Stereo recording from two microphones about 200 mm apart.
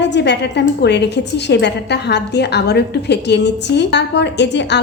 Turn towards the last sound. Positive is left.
turn(degrees=60)  # may be behind; listen again after turning